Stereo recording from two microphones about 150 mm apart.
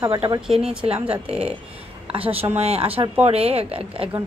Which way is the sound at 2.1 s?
40° right (ahead or behind).